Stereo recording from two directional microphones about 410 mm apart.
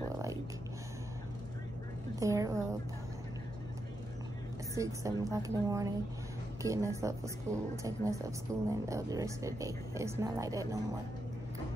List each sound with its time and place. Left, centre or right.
2.1 s speech: centre
4.7 s speech: centre